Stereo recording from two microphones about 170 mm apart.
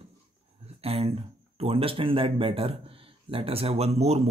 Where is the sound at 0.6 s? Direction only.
35° right (ahead or behind).